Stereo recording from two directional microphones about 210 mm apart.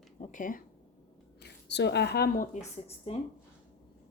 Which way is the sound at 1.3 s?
55° left (ahead or behind).